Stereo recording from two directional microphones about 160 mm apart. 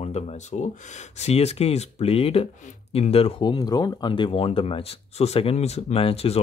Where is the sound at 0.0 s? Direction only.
40° left (ahead or behind).